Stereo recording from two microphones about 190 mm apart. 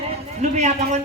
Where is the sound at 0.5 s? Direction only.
35° right (ahead or behind).